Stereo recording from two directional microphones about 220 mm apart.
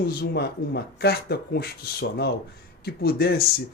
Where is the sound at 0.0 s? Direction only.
45° left (ahead or behind).